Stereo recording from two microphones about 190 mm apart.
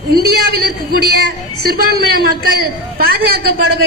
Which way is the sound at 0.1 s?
55° right (ahead or behind).